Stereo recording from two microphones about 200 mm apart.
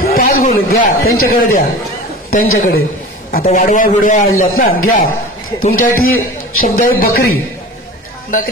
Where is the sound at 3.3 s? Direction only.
45° left (ahead or behind).